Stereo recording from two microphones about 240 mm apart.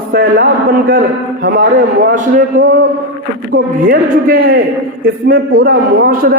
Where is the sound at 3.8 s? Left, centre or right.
Right.